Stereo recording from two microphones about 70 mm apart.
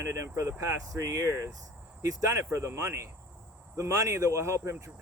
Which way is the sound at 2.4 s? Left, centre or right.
Right.